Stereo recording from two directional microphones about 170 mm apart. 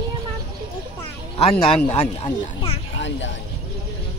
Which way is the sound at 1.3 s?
35° left (ahead or behind).